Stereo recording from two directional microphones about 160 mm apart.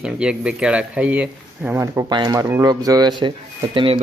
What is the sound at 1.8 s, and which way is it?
Speech, 20° right (ahead or behind).